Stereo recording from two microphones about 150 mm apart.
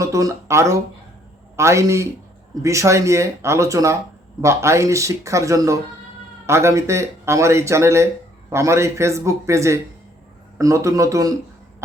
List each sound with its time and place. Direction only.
0.0 s speech: 20° right (ahead or behind)